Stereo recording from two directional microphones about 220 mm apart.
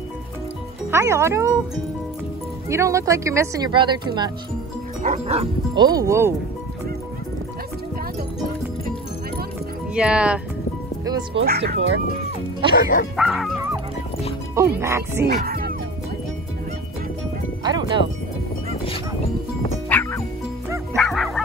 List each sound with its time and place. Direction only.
0.9 s speech: 10° right (ahead or behind)
2.7 s speech: 15° right (ahead or behind)
5.0 s speech: 30° right (ahead or behind); by 6.3 s 10° right (ahead or behind)
9.9 s speech: 5° right (ahead or behind)
11.3 s speech: 50° right (ahead or behind)
13.1 s speech: centre (ahead or behind)
14.5 s speech: 10° right (ahead or behind)
15.2 s music: 45° right (ahead or behind)
17.6 s speech: 20° right (ahead or behind)
19.9 s music: 10° left (ahead or behind)
20.9 s bow-wow: centre (ahead or behind)